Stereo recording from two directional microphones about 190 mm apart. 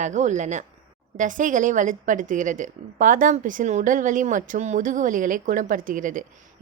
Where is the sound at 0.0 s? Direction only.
40° right (ahead or behind).